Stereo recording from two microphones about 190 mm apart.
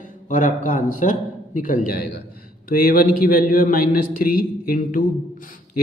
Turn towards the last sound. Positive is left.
turn(degrees=45)  # may be behind; listen again after turning